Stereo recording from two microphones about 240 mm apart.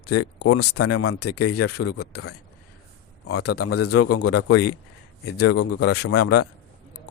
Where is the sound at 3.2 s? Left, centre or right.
Left.